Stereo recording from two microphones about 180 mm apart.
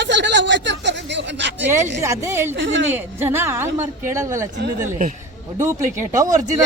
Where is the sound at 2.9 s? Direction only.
10° right (ahead or behind).